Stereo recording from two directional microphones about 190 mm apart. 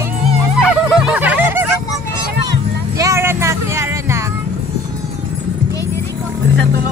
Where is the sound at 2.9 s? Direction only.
15° right (ahead or behind).